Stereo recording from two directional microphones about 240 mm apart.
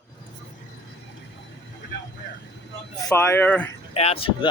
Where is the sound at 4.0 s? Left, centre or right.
Left.